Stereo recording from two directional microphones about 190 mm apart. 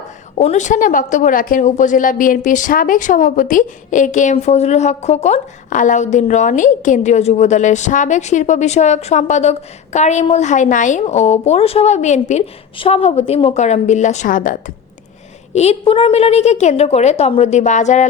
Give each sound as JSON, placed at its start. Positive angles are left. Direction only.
{"t": 0.3, "sound": "a woman's voice", "side_deg": 40}
{"t": 15.5, "sound": "a woman's voice", "side_deg": 30}